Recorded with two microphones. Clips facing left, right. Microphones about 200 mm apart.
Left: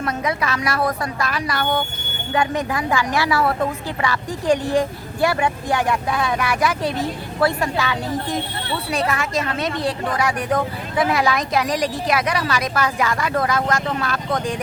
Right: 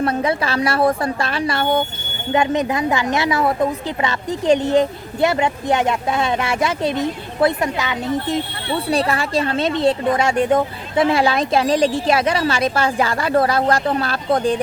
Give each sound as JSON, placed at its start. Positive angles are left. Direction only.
{"t": 0.0, "sound": "a woman's voice", "side_deg": -30}
{"t": 8.9, "sound": "a woman's voice", "side_deg": -35}